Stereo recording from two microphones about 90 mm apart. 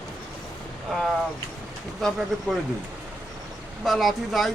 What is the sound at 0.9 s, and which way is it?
Speech, centre (ahead or behind).